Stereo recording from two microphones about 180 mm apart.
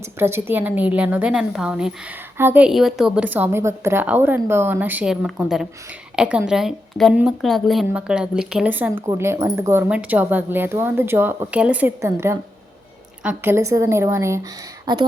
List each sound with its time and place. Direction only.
0.0 s a woman's voice: 15° right (ahead or behind)